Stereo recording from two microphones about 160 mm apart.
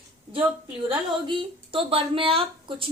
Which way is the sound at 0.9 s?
35° right (ahead or behind).